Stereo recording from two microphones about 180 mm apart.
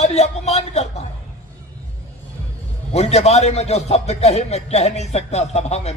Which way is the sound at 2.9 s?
35° left (ahead or behind).